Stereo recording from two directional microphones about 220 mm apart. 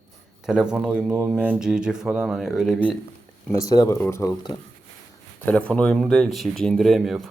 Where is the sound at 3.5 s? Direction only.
15° left (ahead or behind).